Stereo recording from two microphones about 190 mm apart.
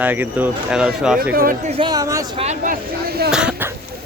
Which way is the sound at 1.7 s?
25° right (ahead or behind).